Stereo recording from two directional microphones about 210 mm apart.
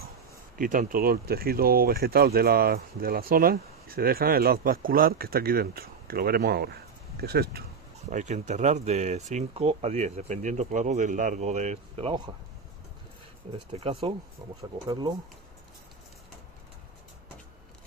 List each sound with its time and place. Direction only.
0.6 s speech: 40° right (ahead or behind)
8.1 s speech: 35° right (ahead or behind)
13.7 s speech: 25° right (ahead or behind)